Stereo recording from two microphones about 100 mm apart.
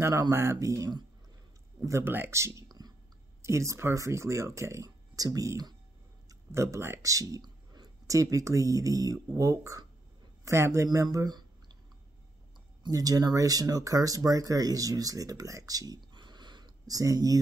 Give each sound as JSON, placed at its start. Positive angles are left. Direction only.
{"t": 0.0, "sound": "speech", "side_deg": -30}
{"t": 12.8, "sound": "speech", "side_deg": -40}